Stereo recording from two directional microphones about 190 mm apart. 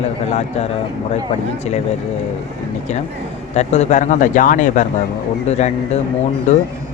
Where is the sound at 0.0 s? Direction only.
35° left (ahead or behind).